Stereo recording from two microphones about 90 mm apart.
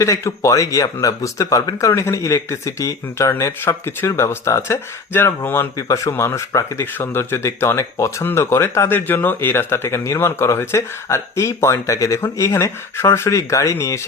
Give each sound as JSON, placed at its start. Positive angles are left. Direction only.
{"t": 0.0, "sound": "speech", "side_deg": 35}
{"t": 5.7, "sound": "speech", "side_deg": 35}